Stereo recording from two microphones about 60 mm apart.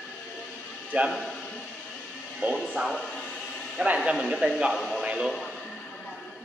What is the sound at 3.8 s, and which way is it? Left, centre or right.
Speech, right.